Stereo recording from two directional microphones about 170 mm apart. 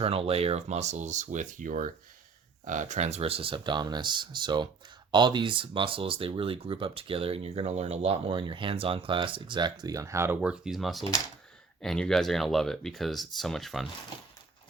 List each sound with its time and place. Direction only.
0.0 s speech: 35° right (ahead or behind); by 13.8 s centre (ahead or behind)